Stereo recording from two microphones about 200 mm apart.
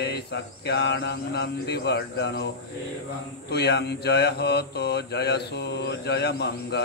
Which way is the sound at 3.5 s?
55° left (ahead or behind).